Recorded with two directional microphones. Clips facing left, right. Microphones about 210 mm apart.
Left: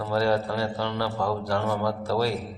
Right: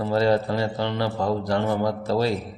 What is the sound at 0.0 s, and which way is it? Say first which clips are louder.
A man's voice: right 3 dB; 20° right (ahead or behind).